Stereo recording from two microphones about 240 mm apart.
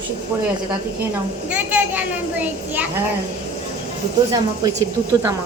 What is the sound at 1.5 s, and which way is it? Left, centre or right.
A child's voice, centre.